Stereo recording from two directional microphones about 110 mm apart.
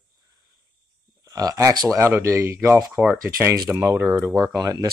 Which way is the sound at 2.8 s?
5° right (ahead or behind).